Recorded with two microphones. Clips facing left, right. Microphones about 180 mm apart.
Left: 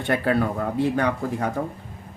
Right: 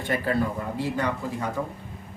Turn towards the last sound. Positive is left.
turn(degrees=60)  # may be behind; listen again after turning